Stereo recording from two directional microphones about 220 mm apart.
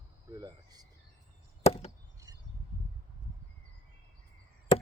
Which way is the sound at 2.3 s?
15° right (ahead or behind).